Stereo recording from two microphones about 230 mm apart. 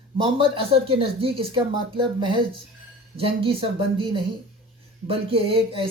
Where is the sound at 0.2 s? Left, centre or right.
Right.